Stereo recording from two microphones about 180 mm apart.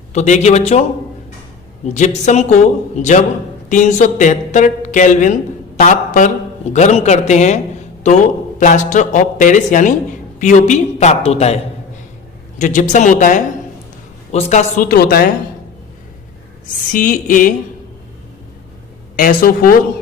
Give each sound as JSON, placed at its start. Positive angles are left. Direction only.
{"t": 0.1, "sound": "a woman's voice", "side_deg": 40}
{"t": 1.9, "sound": "a woman's voice", "side_deg": 40}
{"t": 12.5, "sound": "a man's voice", "side_deg": 45}
{"t": 14.8, "sound": "a woman's voice", "side_deg": 55}
{"t": 16.9, "sound": "a man's voice", "side_deg": 50}
{"t": 19.1, "sound": "a man's voice", "side_deg": 50}